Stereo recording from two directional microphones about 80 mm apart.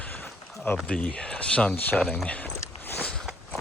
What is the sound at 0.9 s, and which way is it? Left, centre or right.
Speech, centre.